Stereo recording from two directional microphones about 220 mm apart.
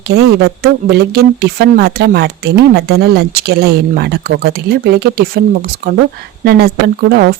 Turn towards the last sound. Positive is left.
turn(degrees=-45)  # may be behind; listen again after turning